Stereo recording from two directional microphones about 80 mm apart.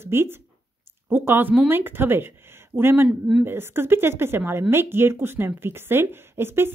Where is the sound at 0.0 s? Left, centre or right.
Right.